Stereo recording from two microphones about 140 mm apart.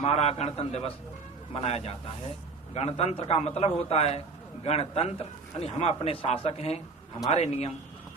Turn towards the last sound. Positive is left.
turn(degrees=50)  # may be behind; listen again after turning